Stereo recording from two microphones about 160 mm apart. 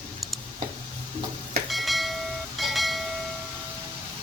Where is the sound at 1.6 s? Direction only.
Centre (ahead or behind).